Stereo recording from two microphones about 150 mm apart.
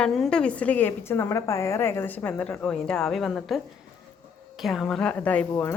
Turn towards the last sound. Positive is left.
turn(degrees=10)  # may be behind; listen again after turning